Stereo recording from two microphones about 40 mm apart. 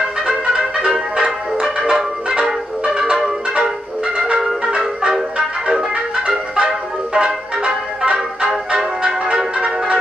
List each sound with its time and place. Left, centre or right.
0.8 s music: centre
2.8 s music: right